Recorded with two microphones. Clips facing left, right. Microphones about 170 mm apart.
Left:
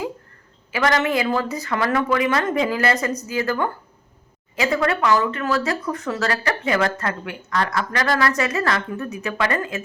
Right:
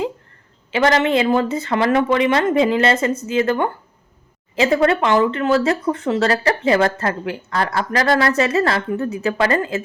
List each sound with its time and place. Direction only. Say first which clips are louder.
0.7 s a woman's voice: right 4 dB; 30° right (ahead or behind)